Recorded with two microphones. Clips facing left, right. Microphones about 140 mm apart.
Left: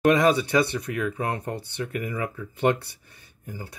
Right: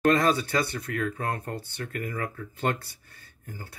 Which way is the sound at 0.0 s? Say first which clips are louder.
Left 3 dB; 15° left (ahead or behind).